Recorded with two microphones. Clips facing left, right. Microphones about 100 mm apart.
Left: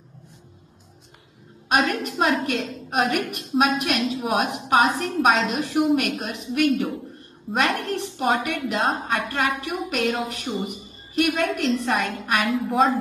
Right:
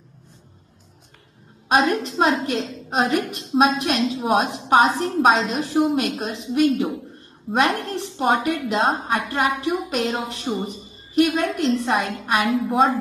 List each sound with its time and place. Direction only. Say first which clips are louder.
1.7 s a woman's voice: right 3 dB; 25° right (ahead or behind)